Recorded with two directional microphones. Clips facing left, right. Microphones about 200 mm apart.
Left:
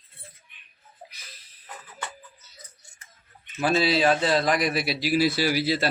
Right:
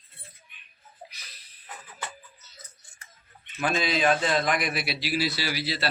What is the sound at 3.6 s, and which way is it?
A man's voice, 35° left (ahead or behind).